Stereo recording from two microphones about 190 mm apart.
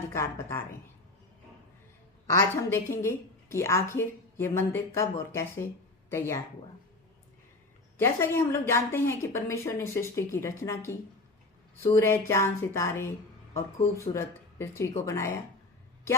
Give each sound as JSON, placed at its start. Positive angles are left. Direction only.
{"t": 0.1, "sound": "a woman's voice", "side_deg": 15}
{"t": 2.3, "sound": "a woman's voice", "side_deg": 15}
{"t": 7.9, "sound": "a woman's voice", "side_deg": 10}
{"t": 11.9, "sound": "a woman's voice", "side_deg": 15}